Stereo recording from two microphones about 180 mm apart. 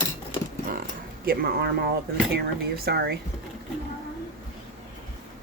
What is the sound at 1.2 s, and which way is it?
Speech, 60° right (ahead or behind).